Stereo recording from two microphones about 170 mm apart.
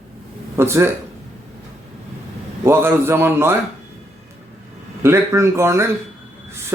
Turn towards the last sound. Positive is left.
turn(degrees=-15)  # may be behind; listen again after turning